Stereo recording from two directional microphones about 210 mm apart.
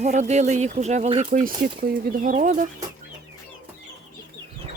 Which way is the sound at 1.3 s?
45° right (ahead or behind).